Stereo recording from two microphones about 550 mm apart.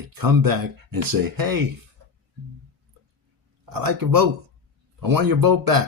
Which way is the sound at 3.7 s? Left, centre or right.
Right.